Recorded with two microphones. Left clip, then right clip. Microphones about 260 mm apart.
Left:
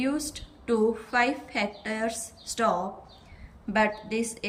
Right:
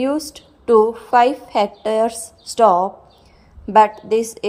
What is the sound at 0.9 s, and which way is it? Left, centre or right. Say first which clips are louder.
Speech: right 13 dB; right.